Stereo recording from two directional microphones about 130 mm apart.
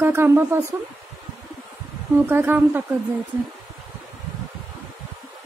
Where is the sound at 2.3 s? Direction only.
15° right (ahead or behind).